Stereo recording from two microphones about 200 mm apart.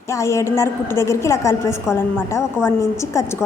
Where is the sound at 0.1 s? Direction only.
15° left (ahead or behind).